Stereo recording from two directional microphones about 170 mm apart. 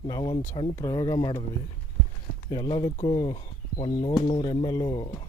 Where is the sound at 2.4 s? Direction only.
25° left (ahead or behind).